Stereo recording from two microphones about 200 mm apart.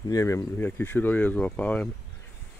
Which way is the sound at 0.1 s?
15° left (ahead or behind).